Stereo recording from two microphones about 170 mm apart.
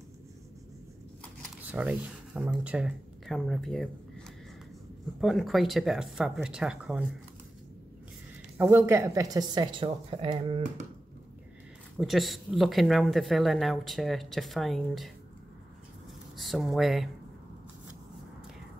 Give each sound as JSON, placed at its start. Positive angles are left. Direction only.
{"t": 1.6, "sound": "speech", "side_deg": -10}
{"t": 5.2, "sound": "speech", "side_deg": 0}
{"t": 8.5, "sound": "speech", "side_deg": -15}
{"t": 12.0, "sound": "speech", "side_deg": 0}
{"t": 16.3, "sound": "speech", "side_deg": 0}